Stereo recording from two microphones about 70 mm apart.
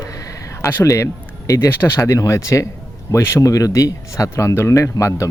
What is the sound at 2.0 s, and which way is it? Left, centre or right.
Speech, left.